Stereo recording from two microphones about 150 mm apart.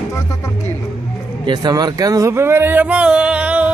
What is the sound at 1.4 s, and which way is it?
Speech, 30° right (ahead or behind).